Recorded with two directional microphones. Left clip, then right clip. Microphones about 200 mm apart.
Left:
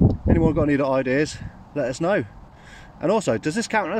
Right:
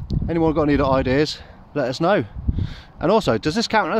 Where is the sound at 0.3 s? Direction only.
20° right (ahead or behind).